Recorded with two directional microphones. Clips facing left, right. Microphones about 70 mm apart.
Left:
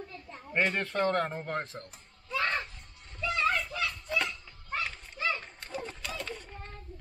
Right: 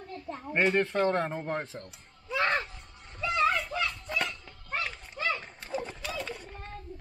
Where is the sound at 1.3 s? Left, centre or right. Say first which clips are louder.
Right 2 dB; centre.